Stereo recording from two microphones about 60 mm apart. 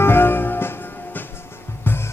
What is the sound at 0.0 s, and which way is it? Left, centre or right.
Music, left.